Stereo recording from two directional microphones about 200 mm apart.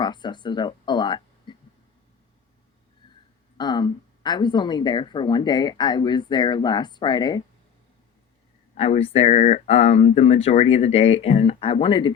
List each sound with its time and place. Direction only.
0.0 s a sound: 20° left (ahead or behind)
3.6 s speech: 20° left (ahead or behind)
8.7 s speech: 30° left (ahead or behind)